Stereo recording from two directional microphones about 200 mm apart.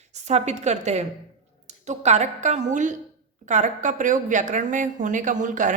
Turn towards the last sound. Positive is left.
turn(degrees=-40)  # may be behind; listen again after turning